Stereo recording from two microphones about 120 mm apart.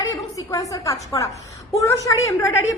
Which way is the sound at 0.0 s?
30° left (ahead or behind).